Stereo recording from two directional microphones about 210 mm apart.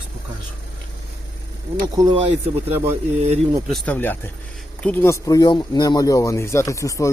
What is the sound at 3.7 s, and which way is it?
Speech, 5° left (ahead or behind).